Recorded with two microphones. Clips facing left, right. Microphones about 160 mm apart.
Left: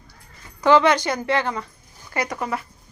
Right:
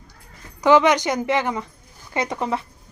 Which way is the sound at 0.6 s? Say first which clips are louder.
Right 1 dB; 15° right (ahead or behind).